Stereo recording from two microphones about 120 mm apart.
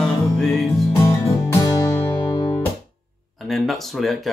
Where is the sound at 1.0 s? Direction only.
25° left (ahead or behind).